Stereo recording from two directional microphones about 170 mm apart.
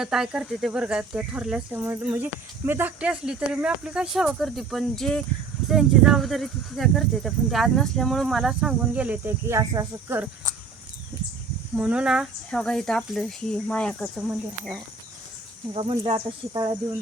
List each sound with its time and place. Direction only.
0.0 s speech: 5° right (ahead or behind)
11.8 s speech: 5° right (ahead or behind)
15.7 s speech: 30° right (ahead or behind)